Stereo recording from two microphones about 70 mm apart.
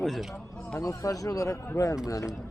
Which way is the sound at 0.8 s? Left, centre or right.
Left.